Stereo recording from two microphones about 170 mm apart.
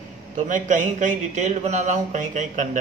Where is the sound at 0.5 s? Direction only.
45° right (ahead or behind).